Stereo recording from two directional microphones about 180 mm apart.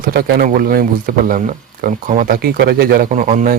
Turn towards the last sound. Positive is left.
turn(degrees=-45)  # may be behind; listen again after turning